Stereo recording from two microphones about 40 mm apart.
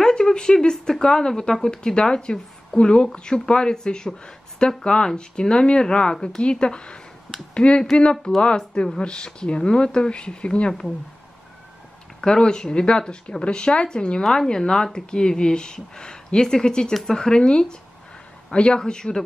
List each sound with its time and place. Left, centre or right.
0.0 s speech: centre
12.2 s speech: centre